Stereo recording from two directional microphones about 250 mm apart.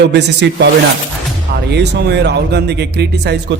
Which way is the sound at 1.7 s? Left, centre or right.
Right.